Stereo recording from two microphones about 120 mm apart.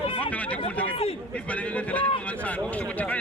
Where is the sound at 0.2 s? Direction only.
10° left (ahead or behind).